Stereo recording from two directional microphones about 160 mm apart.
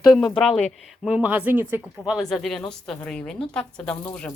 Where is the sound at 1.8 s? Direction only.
Centre (ahead or behind).